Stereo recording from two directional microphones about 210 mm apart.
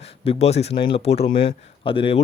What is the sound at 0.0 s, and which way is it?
Speech, 30° left (ahead or behind).